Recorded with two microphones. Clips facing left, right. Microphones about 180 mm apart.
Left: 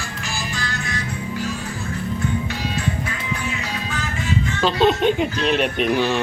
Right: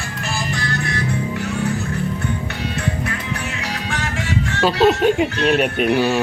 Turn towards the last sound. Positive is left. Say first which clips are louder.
# right 3 dB
turn(degrees=-5)  # may be behind; listen again after turning